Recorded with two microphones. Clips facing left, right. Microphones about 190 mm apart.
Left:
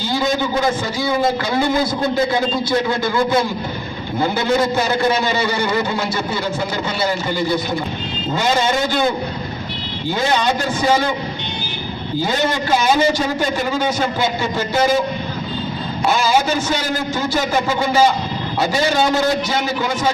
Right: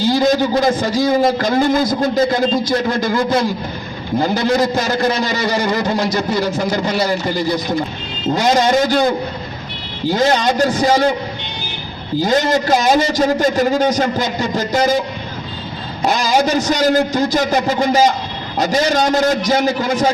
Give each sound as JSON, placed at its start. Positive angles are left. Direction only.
{"t": 0.1, "sound": "a man's voice", "side_deg": -35}
{"t": 8.4, "sound": "a man's voice", "side_deg": -40}
{"t": 10.1, "sound": "a man's voice", "side_deg": -40}
{"t": 12.2, "sound": "a man's voice", "side_deg": -40}
{"t": 16.0, "sound": "a man's voice", "side_deg": -40}